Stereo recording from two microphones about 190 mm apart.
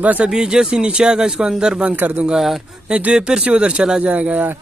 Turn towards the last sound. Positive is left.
turn(degrees=-10)  # may be behind; listen again after turning